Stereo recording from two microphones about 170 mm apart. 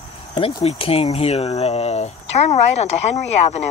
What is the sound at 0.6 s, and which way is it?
Speech, 35° left (ahead or behind).